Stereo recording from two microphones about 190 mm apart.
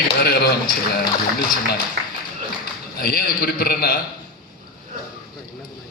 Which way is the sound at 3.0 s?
50° left (ahead or behind).